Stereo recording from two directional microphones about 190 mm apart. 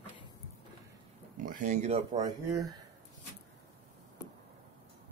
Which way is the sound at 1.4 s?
45° right (ahead or behind).